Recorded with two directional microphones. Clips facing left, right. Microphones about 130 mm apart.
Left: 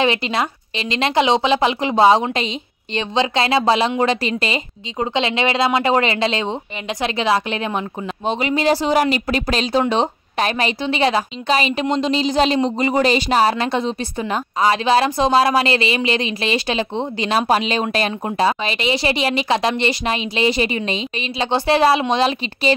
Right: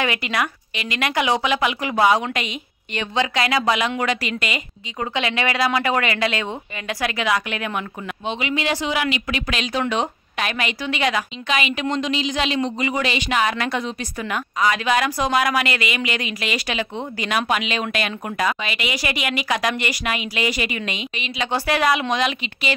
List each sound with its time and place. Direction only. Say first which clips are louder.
0.0 s speech: left 4 dB; 25° left (ahead or behind)